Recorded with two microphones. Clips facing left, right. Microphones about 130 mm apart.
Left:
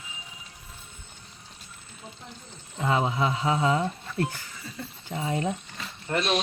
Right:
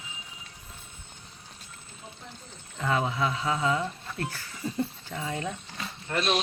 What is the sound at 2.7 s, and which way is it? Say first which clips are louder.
Speech: left 2 dB; 25° left (ahead or behind).